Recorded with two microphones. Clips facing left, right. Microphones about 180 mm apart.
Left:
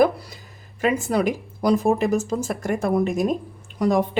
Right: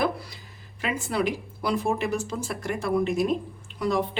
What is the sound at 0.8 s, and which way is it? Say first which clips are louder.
A woman's voice: left 6 dB; 45° left (ahead or behind).